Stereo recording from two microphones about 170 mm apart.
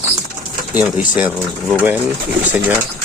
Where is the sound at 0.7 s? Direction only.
5° right (ahead or behind).